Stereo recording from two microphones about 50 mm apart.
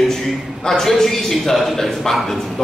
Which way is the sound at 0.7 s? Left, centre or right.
Centre.